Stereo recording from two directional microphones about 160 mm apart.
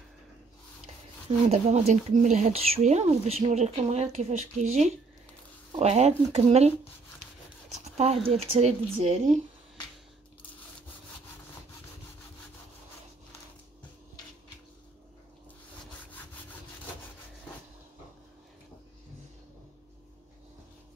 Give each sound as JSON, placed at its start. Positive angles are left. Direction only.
{"t": 1.5, "sound": "speech", "side_deg": -40}
{"t": 5.8, "sound": "speech", "side_deg": -45}
{"t": 7.8, "sound": "speech", "side_deg": -40}